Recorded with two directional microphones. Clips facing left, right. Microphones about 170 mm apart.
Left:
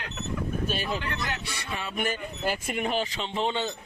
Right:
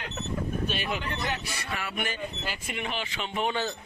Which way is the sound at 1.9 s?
45° left (ahead or behind).